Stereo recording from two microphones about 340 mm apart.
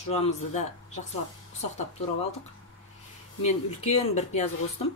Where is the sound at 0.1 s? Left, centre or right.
Centre.